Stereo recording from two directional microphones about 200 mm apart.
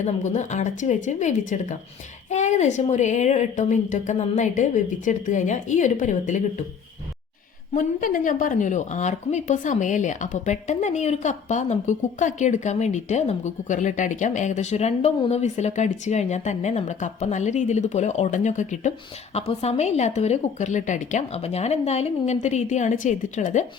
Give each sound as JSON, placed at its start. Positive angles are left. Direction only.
{"t": 0.0, "sound": "a woman's voice", "side_deg": 35}
{"t": 7.7, "sound": "a woman's voice", "side_deg": 40}